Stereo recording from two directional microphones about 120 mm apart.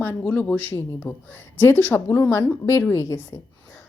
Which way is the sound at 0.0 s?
15° left (ahead or behind).